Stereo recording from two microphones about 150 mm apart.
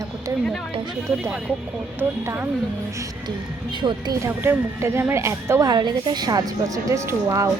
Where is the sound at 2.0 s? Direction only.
15° right (ahead or behind).